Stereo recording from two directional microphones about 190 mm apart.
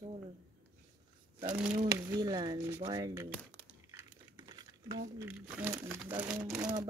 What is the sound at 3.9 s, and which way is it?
Crumpling, 20° right (ahead or behind).